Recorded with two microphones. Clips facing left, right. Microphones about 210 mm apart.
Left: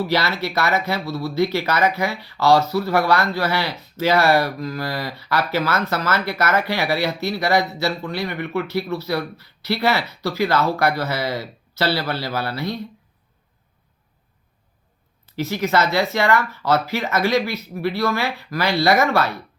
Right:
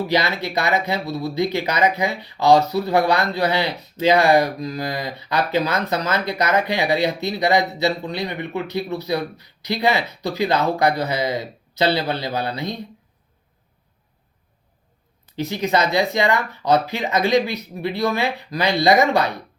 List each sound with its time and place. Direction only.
0.1 s speech: 20° right (ahead or behind)
15.4 s speech: 20° right (ahead or behind)